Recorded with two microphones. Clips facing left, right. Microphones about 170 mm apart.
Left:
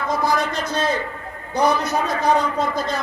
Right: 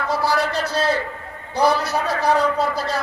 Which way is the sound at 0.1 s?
35° right (ahead or behind).